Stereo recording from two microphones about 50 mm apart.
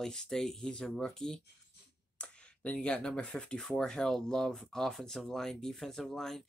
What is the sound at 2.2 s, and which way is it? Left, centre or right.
Speech, left.